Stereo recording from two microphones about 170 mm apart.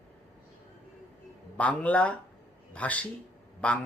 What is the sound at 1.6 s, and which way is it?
A man's voice, 10° left (ahead or behind).